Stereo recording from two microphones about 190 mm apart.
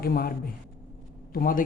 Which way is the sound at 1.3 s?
50° left (ahead or behind).